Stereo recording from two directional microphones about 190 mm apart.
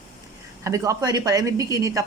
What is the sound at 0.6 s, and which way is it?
Speech, 15° right (ahead or behind).